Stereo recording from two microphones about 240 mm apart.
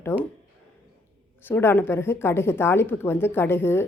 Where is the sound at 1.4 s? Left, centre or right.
Centre.